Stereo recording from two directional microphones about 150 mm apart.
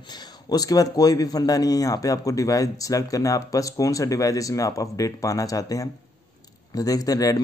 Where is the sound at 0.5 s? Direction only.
25° left (ahead or behind).